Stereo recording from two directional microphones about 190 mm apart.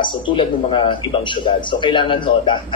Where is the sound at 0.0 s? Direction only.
25° left (ahead or behind).